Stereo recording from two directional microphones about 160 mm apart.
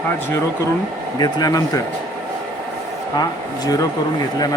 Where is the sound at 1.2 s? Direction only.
25° left (ahead or behind).